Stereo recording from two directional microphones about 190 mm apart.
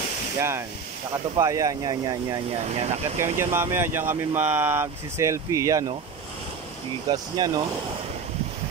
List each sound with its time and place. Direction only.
0.4 s speech: 10° right (ahead or behind)
2.6 s speech: 35° right (ahead or behind)
3.5 s speech: 15° right (ahead or behind)
7.1 s speech: 20° right (ahead or behind)